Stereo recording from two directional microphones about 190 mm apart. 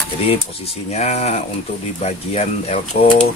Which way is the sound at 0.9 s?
35° left (ahead or behind).